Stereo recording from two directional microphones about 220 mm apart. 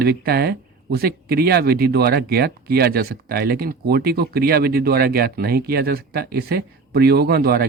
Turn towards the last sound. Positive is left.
turn(degrees=-45)  # may be behind; listen again after turning